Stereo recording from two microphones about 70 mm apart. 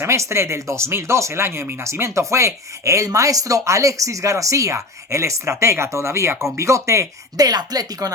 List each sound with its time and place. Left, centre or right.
0.0 s speech: right